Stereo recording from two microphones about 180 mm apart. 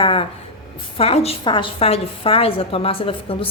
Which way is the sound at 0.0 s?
30° left (ahead or behind).